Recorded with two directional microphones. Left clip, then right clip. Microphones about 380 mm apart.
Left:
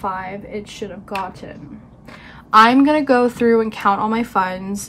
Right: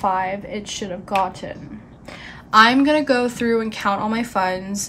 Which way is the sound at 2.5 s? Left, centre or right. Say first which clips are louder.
Left 2 dB; centre.